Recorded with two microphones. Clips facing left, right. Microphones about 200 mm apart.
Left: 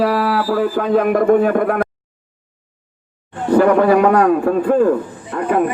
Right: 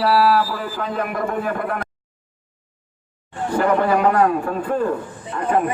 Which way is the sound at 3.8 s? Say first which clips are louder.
Left 5 dB; 55° left (ahead or behind).